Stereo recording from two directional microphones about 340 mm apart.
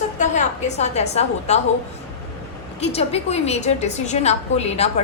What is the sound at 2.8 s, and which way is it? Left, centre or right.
A woman's voice, centre.